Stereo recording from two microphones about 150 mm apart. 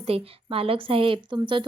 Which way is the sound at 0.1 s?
40° right (ahead or behind).